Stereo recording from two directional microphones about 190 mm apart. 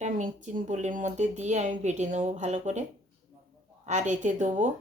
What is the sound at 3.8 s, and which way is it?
Speech, 40° right (ahead or behind).